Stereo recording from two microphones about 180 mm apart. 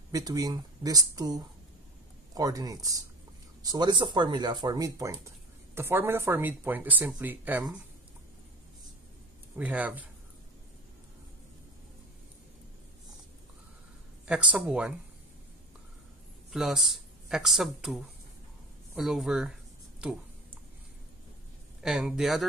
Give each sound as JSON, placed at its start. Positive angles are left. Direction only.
{"t": 0.1, "sound": "speech", "side_deg": -20}
{"t": 9.6, "sound": "speech", "side_deg": -10}
{"t": 14.2, "sound": "speech", "side_deg": -5}
{"t": 16.5, "sound": "speech", "side_deg": 0}
{"t": 21.8, "sound": "speech", "side_deg": -5}